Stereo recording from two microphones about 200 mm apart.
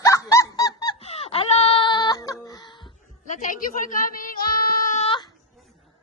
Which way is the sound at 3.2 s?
40° left (ahead or behind).